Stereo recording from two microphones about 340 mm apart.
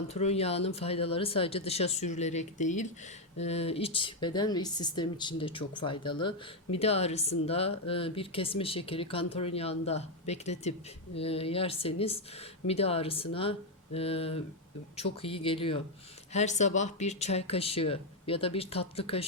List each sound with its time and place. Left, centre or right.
0.1 s speech: centre